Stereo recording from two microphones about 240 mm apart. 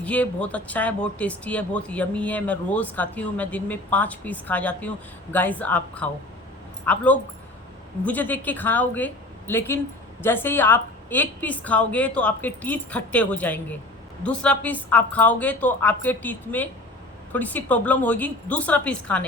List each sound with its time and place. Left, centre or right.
0.0 s a woman's voice: centre